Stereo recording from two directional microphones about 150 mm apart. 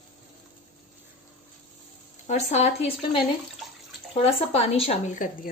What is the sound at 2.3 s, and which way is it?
A woman's voice, 50° left (ahead or behind).